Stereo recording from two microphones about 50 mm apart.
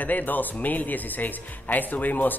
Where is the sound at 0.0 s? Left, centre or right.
Left.